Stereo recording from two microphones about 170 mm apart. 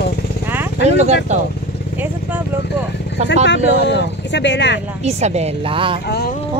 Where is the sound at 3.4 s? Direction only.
90° left.